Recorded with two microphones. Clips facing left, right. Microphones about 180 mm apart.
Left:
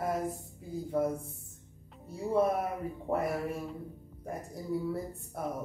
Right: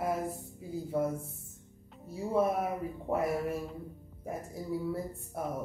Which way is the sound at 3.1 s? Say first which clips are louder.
Right 1 dB; centre (ahead or behind).